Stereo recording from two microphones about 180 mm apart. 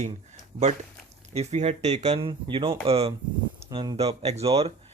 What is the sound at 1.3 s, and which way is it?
Speech, 35° right (ahead or behind).